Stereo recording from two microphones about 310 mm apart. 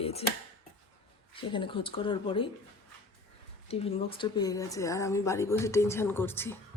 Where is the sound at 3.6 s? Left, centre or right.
Centre.